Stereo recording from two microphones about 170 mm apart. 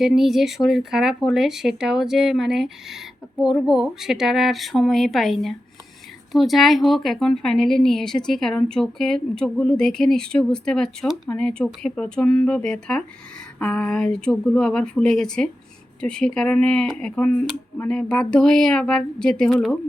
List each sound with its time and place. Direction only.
0.0 s a woman's voice: centre (ahead or behind)